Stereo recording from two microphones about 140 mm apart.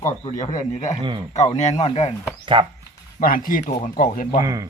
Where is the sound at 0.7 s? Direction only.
55° left (ahead or behind).